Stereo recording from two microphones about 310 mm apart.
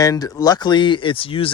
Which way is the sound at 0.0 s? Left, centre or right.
Centre.